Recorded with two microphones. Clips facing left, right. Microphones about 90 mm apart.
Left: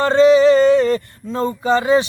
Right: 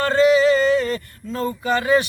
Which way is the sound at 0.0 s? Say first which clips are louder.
Left 4 dB; 30° left (ahead or behind).